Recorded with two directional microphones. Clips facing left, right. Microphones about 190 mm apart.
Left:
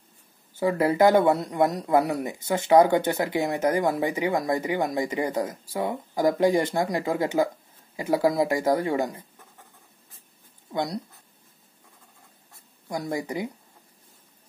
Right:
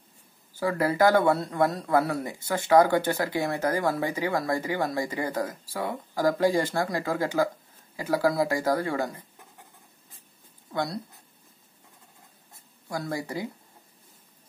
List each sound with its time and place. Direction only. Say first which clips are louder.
0.6 s speech: left 3 dB; 20° left (ahead or behind)
10.7 s speech: left 2 dB; 20° left (ahead or behind)
12.8 s speech: left 2 dB; 20° left (ahead or behind)